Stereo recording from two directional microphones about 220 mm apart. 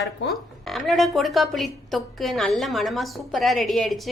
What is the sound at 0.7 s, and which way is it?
A woman's voice, centre (ahead or behind).